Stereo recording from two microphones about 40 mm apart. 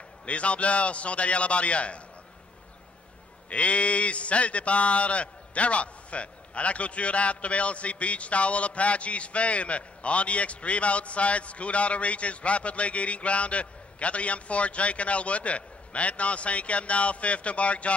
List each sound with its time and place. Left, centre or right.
0.2 s speech: left
3.4 s speech: left